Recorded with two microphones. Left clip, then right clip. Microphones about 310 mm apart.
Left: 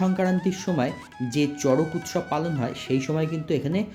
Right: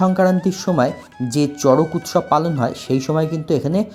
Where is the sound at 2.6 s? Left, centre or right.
Centre.